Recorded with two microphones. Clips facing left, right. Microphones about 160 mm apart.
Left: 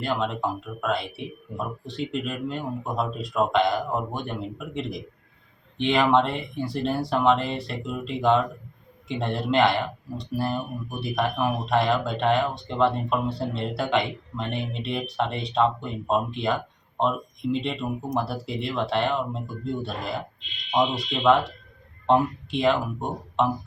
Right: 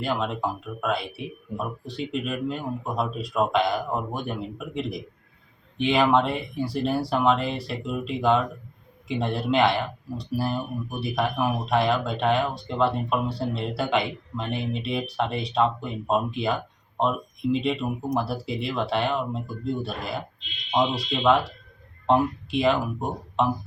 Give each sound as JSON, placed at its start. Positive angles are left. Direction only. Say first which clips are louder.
{"t": 0.0, "sound": "speech", "louder": "even", "side_deg": 0}